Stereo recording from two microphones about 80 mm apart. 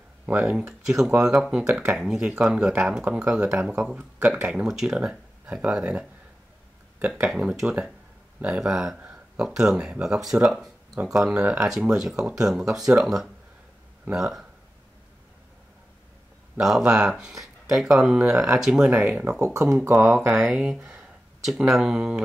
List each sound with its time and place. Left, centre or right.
0.3 s speech: centre
3.1 s speech: centre
7.3 s speech: centre
16.5 s speech: centre
18.9 s speech: centre
19.4 s speech: right
20.2 s speech: centre